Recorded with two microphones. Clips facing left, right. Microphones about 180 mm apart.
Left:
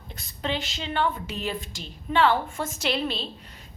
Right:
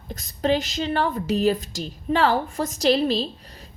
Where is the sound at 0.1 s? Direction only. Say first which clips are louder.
Right 8 dB; 40° right (ahead or behind).